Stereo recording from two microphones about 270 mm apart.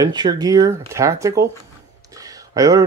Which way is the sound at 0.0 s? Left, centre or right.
Centre.